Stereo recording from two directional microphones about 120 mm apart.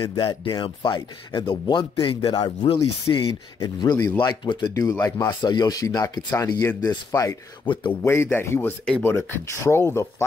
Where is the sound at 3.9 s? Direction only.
20° left (ahead or behind).